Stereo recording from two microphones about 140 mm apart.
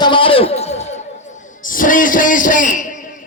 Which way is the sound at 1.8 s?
75° left (ahead or behind).